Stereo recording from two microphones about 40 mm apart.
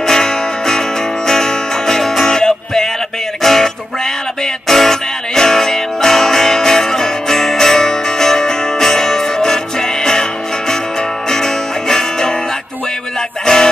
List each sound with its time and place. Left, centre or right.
0.0 s music: centre
11.2 s music: centre
13.5 s music: centre